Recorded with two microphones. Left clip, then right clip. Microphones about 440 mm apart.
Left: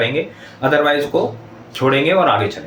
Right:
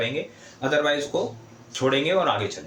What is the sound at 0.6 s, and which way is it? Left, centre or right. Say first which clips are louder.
Speech: left 8 dB; right.